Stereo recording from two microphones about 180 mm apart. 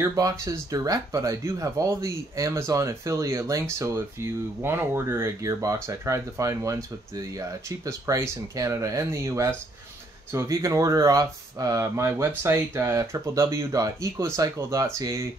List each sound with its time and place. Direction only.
0.0 s speech: 20° right (ahead or behind)